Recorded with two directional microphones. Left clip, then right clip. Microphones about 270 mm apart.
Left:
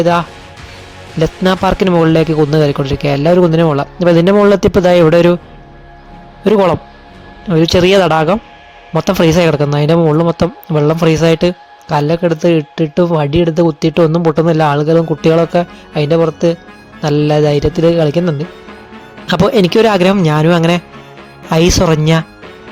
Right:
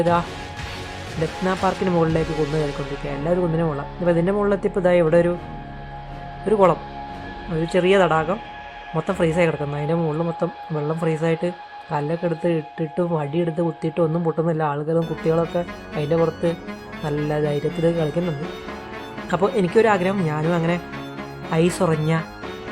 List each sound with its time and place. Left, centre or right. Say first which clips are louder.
0.0 s speech: left 8 dB; left
1.5 s speech: left 9 dB; left
6.4 s speech: left 7 dB; left